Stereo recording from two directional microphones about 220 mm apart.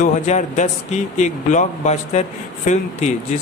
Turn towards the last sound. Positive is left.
turn(degrees=30)  # may be behind; listen again after turning